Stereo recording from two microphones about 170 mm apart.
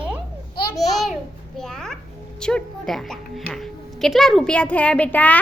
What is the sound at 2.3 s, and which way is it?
A woman's voice, 5° left (ahead or behind).